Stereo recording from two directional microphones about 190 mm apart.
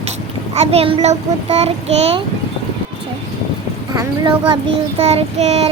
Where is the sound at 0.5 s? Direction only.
35° right (ahead or behind).